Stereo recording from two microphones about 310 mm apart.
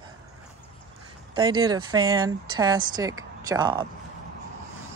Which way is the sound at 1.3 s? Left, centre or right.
Centre.